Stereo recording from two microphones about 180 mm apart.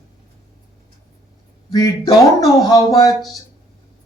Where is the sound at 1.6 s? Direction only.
20° left (ahead or behind).